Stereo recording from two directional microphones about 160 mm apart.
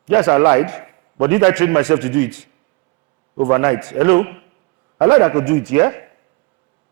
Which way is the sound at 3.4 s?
15° right (ahead or behind).